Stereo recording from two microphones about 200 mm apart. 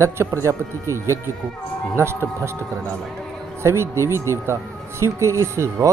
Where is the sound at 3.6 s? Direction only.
15° right (ahead or behind).